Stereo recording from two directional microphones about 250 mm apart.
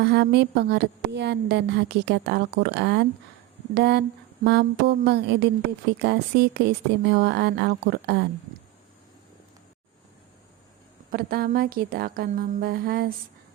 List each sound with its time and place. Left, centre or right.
0.0 s a woman's voice: right
11.1 s speech: right